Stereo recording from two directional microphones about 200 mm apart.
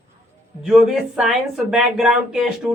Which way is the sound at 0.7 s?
Centre (ahead or behind).